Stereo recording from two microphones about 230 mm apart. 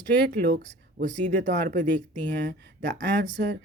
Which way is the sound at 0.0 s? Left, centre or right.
Right.